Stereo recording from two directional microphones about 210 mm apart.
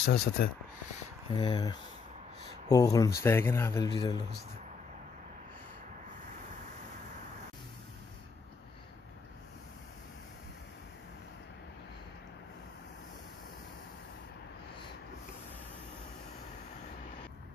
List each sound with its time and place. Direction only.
0.1 s speech: 50° left (ahead or behind)
1.3 s speech: 20° left (ahead or behind)